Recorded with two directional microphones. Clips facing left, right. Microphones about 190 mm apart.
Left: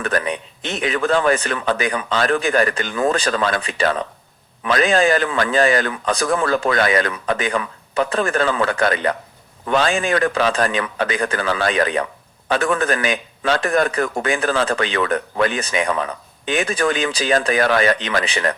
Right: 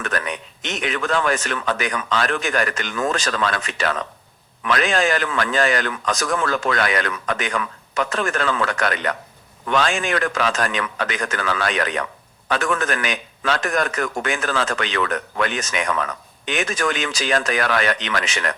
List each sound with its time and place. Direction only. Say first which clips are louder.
0.0 s a man's voice: left 4 dB; 30° left (ahead or behind)